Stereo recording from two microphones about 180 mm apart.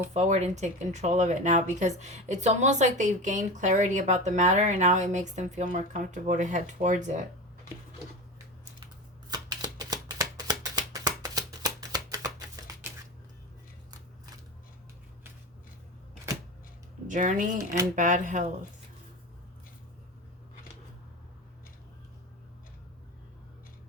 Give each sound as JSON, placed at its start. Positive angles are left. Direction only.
{"t": 0.1, "sound": "speech", "side_deg": -40}
{"t": 9.3, "sound": "shuffling cards", "side_deg": -20}
{"t": 17.1, "sound": "speech", "side_deg": -45}